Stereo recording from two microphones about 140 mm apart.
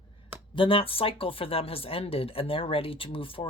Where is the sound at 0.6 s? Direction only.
40° left (ahead or behind).